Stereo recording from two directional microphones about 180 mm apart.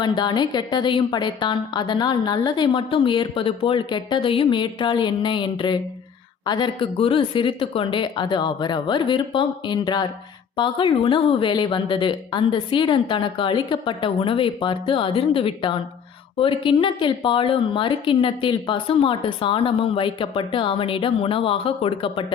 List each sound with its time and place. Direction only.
0.0 s a woman's voice: 25° left (ahead or behind)